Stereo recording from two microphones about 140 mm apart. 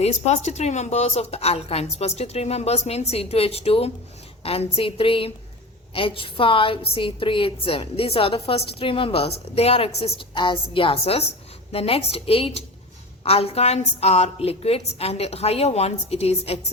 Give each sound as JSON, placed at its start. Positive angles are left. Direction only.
{"t": 0.0, "sound": "a woman's voice", "side_deg": 55}